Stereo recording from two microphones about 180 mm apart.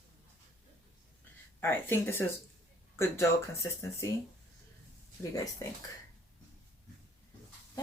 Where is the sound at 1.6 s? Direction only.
15° left (ahead or behind).